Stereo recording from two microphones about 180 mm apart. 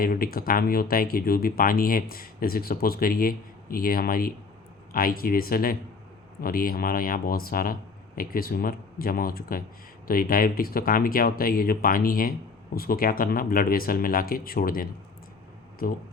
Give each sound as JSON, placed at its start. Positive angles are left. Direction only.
{"t": 0.0, "sound": "speech", "side_deg": 55}